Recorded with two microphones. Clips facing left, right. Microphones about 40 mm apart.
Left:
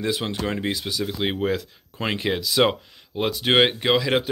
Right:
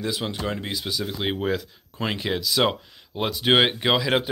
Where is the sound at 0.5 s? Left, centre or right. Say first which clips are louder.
Left 2 dB; centre.